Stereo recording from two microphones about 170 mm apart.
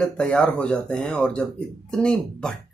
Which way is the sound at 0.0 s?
5° left (ahead or behind).